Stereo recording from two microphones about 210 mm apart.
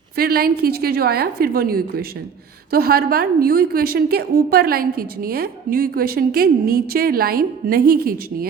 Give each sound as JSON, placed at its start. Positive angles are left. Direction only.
{"t": 0.2, "sound": "a woman's voice", "side_deg": -45}